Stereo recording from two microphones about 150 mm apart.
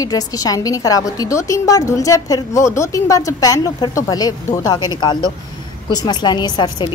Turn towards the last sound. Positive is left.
turn(degrees=30)  # may be behind; listen again after turning